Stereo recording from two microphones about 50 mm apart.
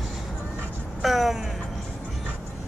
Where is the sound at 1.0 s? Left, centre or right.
Centre.